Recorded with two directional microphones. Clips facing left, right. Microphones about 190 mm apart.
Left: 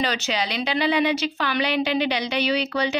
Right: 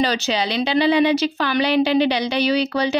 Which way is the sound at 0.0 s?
35° right (ahead or behind).